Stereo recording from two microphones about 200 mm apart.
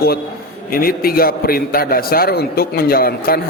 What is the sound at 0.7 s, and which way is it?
A man's voice, 45° left (ahead or behind).